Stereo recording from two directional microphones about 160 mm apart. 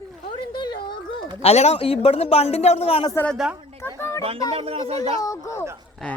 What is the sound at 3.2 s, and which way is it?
Speech, centre (ahead or behind).